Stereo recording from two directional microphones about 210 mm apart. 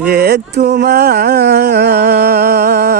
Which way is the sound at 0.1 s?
50° right (ahead or behind).